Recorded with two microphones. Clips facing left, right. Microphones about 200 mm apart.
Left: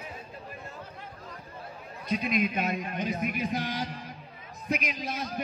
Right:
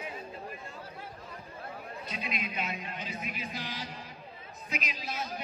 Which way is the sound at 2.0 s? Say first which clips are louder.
Left 12 dB; 45° left (ahead or behind).